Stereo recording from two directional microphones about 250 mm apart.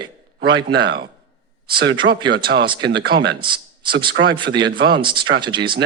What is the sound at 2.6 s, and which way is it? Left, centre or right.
Speech, centre.